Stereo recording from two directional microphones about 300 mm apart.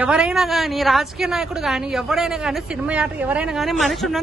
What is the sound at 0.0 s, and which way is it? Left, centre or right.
A woman's voice, centre.